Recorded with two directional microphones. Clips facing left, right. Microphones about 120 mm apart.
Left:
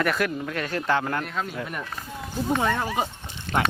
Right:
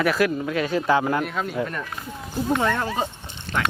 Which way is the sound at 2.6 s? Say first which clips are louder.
Right 1 dB; 10° left (ahead or behind).